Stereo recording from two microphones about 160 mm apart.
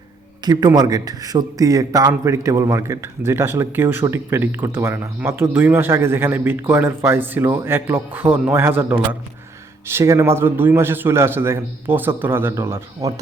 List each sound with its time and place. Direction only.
0.4 s a man's voice: 25° right (ahead or behind)